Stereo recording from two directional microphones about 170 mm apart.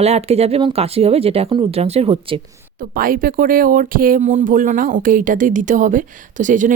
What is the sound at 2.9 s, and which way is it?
Speech, 55° right (ahead or behind).